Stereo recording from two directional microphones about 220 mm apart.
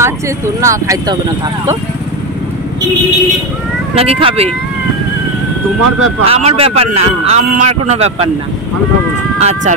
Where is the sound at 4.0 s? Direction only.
25° right (ahead or behind).